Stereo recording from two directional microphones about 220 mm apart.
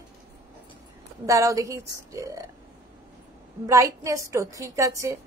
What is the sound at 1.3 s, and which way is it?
Female singing, 15° right (ahead or behind).